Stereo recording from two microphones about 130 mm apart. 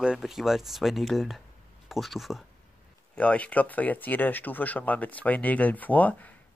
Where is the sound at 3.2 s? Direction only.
10° left (ahead or behind).